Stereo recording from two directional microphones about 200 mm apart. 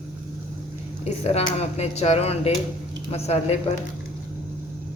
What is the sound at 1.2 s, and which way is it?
A woman's voice, 30° left (ahead or behind).